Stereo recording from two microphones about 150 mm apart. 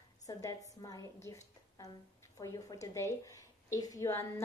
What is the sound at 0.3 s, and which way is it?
A woman's voice, 20° left (ahead or behind).